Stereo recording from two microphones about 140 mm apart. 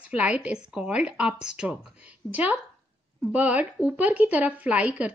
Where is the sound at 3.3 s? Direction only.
10° right (ahead or behind).